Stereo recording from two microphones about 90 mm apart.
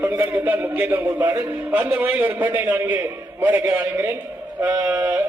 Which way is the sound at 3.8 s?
35° right (ahead or behind).